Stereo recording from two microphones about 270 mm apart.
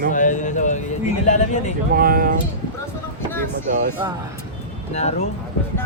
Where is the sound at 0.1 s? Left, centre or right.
Left.